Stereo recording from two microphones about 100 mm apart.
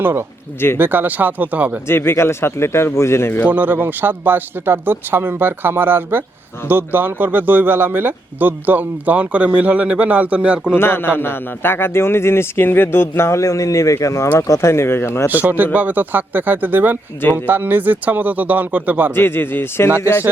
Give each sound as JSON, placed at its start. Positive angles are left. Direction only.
{"t": 0.0, "sound": "speech", "side_deg": -25}
{"t": 1.9, "sound": "a man's voice", "side_deg": 25}
{"t": 3.5, "sound": "speech", "side_deg": -20}
{"t": 10.8, "sound": "a man's voice", "side_deg": 25}
{"t": 15.3, "sound": "speech", "side_deg": -15}
{"t": 19.1, "sound": "a man's voice", "side_deg": 20}